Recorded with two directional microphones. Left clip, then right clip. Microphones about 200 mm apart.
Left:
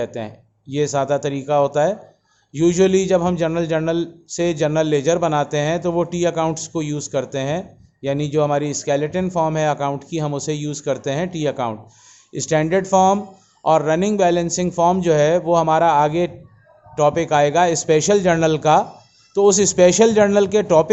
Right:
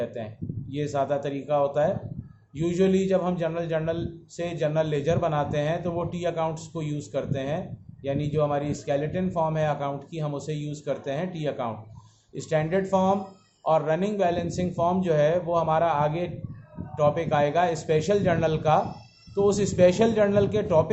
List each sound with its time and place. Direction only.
0.0 s a man's voice: 55° left (ahead or behind)